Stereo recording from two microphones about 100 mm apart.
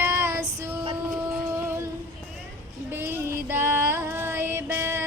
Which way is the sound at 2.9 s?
20° right (ahead or behind).